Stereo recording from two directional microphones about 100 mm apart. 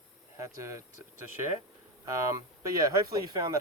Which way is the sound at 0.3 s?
30° right (ahead or behind).